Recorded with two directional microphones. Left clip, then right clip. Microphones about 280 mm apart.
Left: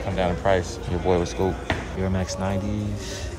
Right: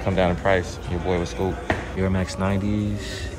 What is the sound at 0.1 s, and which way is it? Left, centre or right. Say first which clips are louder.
Speech: right 2 dB; centre.